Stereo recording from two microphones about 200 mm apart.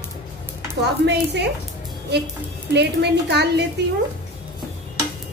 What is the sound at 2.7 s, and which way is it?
Speech, 60° right (ahead or behind).